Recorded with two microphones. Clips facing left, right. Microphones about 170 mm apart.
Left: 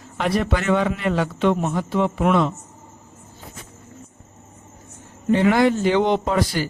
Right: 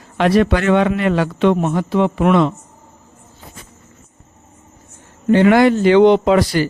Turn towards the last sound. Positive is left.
turn(degrees=-85)